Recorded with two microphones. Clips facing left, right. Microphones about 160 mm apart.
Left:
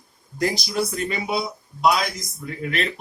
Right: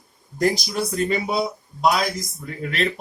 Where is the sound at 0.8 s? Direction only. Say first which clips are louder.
Right 3 dB; 35° right (ahead or behind).